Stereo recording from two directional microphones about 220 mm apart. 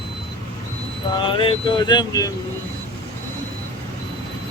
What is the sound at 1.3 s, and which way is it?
Speech, 20° left (ahead or behind).